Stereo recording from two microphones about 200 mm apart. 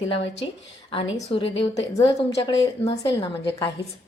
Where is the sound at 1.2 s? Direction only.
30° left (ahead or behind).